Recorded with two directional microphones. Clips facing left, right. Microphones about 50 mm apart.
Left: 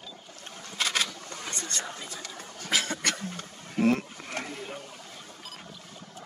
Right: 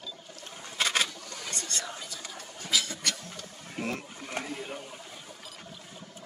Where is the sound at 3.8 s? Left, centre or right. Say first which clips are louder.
Left 10 dB; centre.